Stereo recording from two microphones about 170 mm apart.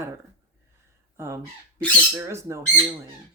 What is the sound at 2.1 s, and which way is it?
Speech, 15° right (ahead or behind).